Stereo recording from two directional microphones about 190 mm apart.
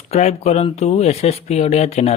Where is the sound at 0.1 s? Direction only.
35° left (ahead or behind).